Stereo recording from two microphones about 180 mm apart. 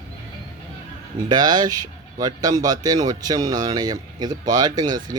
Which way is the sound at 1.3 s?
20° right (ahead or behind).